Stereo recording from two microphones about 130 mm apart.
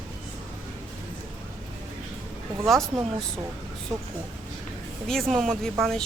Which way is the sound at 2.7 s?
5° left (ahead or behind).